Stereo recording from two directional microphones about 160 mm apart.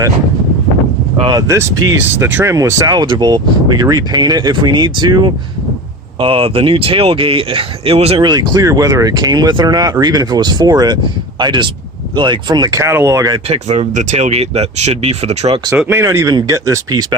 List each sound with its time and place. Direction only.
1.2 s speech: 25° right (ahead or behind)
8.2 s speech: 25° right (ahead or behind)
13.5 s speech: 45° right (ahead or behind)
15.9 s speech: 15° right (ahead or behind)